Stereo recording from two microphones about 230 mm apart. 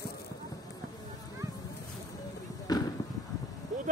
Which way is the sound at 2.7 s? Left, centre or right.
Centre.